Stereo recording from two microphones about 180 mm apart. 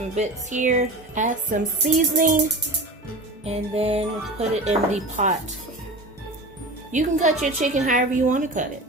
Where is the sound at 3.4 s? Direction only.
35° right (ahead or behind).